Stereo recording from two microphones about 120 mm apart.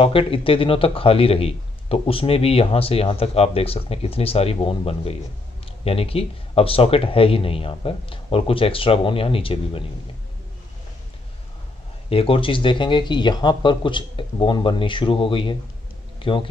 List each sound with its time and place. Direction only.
0.0 s speech: 50° left (ahead or behind)
12.1 s speech: 50° left (ahead or behind)